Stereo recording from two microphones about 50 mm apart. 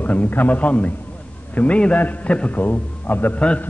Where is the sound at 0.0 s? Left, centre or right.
Left.